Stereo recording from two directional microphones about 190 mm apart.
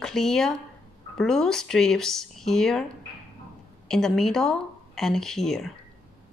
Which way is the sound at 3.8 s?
5° left (ahead or behind).